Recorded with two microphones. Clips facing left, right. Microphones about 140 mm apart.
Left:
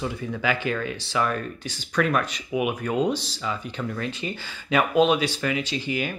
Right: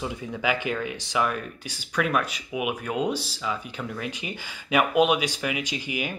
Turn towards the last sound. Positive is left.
turn(degrees=-15)  # may be behind; listen again after turning